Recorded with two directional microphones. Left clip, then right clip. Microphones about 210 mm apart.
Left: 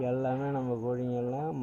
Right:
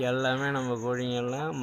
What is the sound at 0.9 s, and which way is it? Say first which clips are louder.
Speech: right 2 dB; 10° right (ahead or behind).